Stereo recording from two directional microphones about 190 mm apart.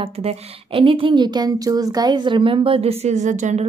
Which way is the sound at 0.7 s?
25° right (ahead or behind).